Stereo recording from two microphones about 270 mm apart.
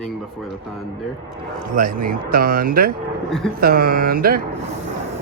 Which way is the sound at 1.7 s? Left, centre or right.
Right.